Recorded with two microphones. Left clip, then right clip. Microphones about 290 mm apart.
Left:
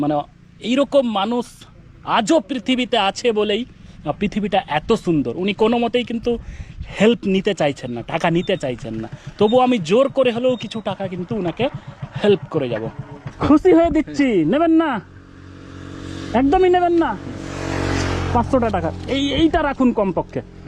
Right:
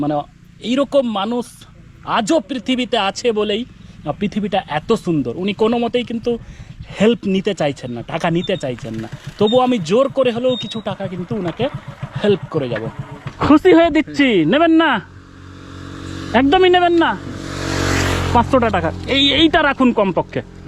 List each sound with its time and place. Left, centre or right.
0.0 s speech: centre
15.8 s vehicle: centre
16.3 s speech: centre